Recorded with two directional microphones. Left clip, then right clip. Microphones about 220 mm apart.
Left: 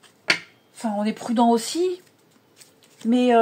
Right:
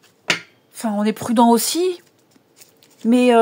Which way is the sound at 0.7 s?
40° right (ahead or behind).